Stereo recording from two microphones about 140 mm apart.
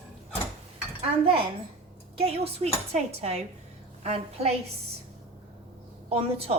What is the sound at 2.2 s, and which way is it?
A woman's voice, 45° right (ahead or behind).